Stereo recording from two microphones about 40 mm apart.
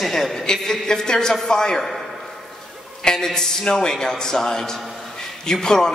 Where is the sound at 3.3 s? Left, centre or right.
Centre.